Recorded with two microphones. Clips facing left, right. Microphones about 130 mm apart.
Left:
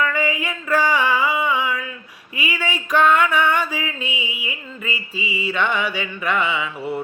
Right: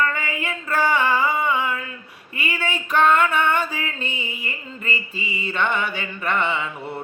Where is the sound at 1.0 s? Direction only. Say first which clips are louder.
Left 1 dB; 10° left (ahead or behind).